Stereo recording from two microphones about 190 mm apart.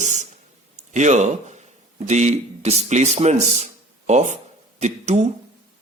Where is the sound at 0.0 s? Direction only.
40° right (ahead or behind).